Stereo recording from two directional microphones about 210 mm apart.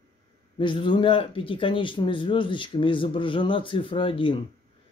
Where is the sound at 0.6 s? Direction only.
20° left (ahead or behind).